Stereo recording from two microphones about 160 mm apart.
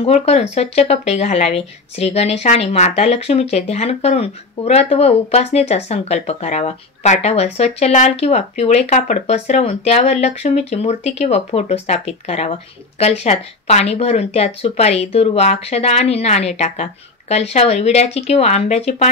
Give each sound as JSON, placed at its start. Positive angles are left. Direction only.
{"t": 0.0, "sound": "speech", "side_deg": 40}